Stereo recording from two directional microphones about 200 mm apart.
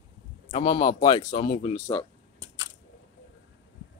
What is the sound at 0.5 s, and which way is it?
Speech, 30° left (ahead or behind).